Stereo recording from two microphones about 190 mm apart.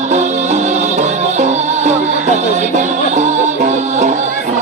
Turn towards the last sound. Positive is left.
turn(degrees=-40)  # may be behind; listen again after turning